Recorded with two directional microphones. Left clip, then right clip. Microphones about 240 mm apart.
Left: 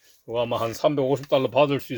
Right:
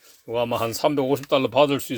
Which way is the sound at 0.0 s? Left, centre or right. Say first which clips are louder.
Right 1 dB; centre.